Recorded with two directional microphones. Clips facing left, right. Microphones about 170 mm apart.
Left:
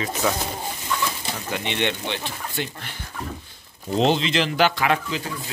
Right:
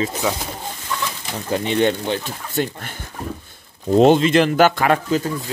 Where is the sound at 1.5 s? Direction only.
40° right (ahead or behind).